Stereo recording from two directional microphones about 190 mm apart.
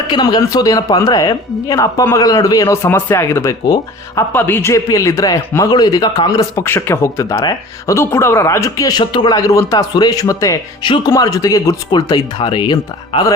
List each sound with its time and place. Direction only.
0.1 s speech: 20° left (ahead or behind)